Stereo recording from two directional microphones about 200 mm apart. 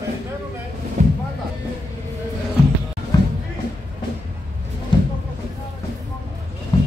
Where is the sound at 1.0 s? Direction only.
40° right (ahead or behind).